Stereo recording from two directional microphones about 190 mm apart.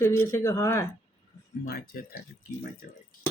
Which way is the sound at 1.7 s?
50° left (ahead or behind).